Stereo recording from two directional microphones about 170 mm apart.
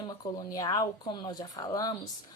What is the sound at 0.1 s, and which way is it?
Speech, 20° left (ahead or behind).